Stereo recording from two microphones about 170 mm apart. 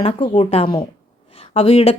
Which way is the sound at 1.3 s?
35° left (ahead or behind).